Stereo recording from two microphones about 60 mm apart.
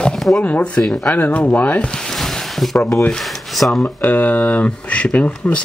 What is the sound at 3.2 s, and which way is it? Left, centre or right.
Speech, centre.